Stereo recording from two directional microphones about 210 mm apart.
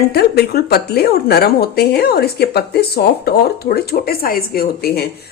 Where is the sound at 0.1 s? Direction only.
50° left (ahead or behind).